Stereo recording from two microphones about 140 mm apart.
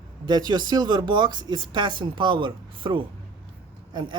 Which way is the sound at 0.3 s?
30° right (ahead or behind).